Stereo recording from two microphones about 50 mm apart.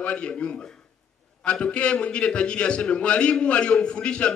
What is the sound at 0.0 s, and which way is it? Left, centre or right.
A man's voice, left.